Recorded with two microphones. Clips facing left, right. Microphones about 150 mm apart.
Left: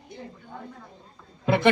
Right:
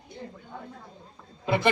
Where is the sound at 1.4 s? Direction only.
60° left (ahead or behind).